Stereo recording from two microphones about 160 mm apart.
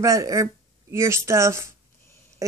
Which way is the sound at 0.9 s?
15° right (ahead or behind).